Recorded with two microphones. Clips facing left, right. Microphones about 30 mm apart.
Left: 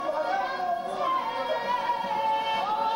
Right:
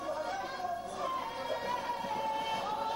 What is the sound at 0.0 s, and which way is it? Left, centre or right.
Music, left.